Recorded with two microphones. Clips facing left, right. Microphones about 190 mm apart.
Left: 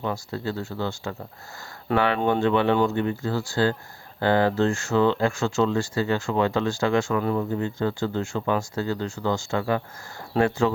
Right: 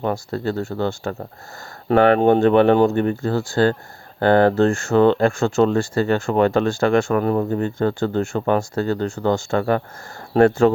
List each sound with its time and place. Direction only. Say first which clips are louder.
0.0 s speech: right 6 dB; 55° right (ahead or behind)